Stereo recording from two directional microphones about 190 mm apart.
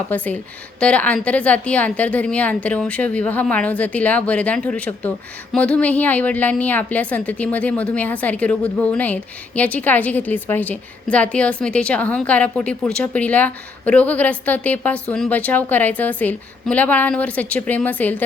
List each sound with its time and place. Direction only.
0.1 s a woman's voice: 10° left (ahead or behind)